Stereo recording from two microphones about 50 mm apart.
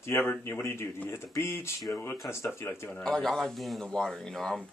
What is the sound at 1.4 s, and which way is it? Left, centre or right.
A man's voice, left.